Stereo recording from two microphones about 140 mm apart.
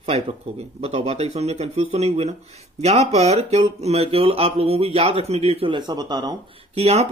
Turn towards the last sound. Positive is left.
turn(degrees=-50)  # may be behind; listen again after turning